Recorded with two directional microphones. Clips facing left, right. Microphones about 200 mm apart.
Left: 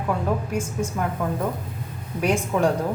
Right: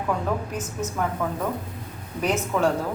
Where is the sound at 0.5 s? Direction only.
10° left (ahead or behind).